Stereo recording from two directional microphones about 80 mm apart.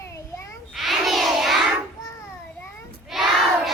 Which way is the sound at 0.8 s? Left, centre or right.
Centre.